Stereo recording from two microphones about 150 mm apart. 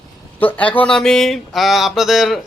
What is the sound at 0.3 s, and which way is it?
Speech, 10° left (ahead or behind).